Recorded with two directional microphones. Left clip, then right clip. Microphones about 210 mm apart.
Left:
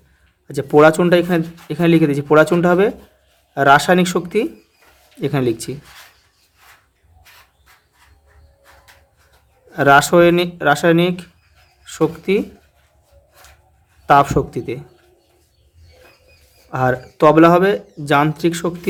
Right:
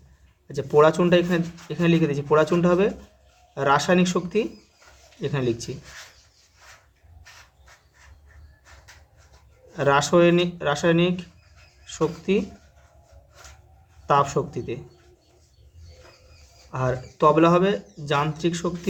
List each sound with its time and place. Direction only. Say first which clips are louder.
0.4 s speech: left 6 dB; 35° left (ahead or behind)
9.7 s speech: left 8 dB; 35° left (ahead or behind)
14.1 s speech: left 8 dB; 35° left (ahead or behind)
16.7 s speech: left 9 dB; 35° left (ahead or behind)